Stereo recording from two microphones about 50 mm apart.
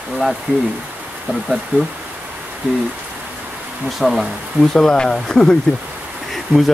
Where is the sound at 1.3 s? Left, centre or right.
Centre.